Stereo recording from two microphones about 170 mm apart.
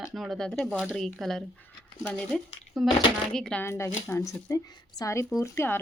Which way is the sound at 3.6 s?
15° left (ahead or behind).